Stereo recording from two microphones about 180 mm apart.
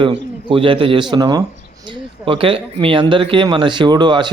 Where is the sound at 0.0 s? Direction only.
30° right (ahead or behind).